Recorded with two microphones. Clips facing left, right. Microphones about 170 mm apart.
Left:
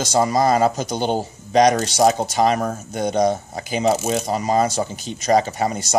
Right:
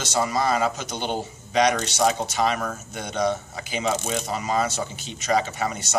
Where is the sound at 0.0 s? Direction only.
35° left (ahead or behind).